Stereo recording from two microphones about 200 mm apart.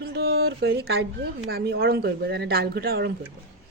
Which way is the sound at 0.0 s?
50° right (ahead or behind).